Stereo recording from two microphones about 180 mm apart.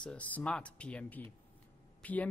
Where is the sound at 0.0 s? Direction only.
5° left (ahead or behind).